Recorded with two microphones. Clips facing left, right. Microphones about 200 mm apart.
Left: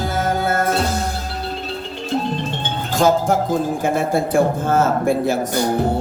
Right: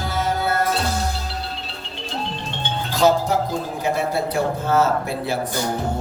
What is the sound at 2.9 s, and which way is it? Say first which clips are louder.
A man's voice: left 2 dB; 50° left (ahead or behind).